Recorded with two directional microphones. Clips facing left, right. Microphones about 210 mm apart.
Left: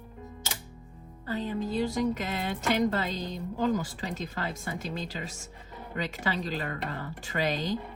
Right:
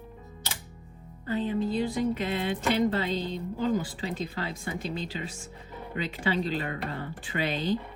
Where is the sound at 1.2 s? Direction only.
40° left (ahead or behind).